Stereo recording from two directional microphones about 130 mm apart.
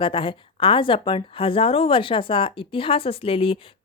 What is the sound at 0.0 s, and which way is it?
Speech, 45° left (ahead or behind).